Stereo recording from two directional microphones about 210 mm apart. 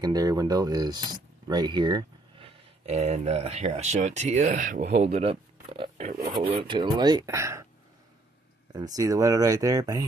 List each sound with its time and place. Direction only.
0.0 s speech: 20° right (ahead or behind)
8.7 s speech: 15° right (ahead or behind)